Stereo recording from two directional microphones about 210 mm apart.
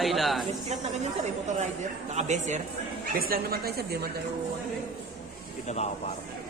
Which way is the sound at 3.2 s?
45° right (ahead or behind).